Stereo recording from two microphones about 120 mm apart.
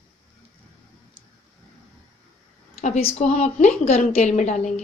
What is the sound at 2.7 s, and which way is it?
A woman's voice, 70° left (ahead or behind).